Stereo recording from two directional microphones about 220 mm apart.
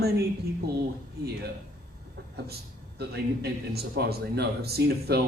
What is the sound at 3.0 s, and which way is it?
Speech, 45° right (ahead or behind).